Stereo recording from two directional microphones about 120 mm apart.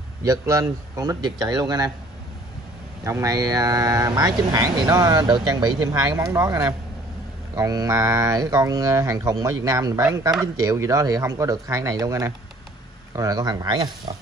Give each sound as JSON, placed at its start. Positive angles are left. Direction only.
{"t": 0.2, "sound": "speech", "side_deg": -30}
{"t": 3.0, "sound": "speech", "side_deg": -25}